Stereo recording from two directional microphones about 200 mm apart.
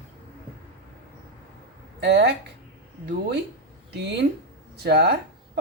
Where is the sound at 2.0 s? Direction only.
55° right (ahead or behind).